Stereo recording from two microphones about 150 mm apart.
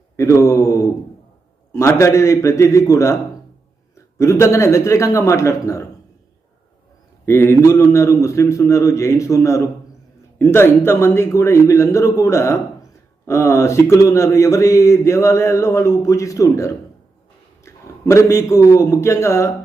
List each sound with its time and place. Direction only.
0.2 s mantra: 20° left (ahead or behind)
1.7 s speech: 20° left (ahead or behind)
7.3 s a man's voice: 15° left (ahead or behind)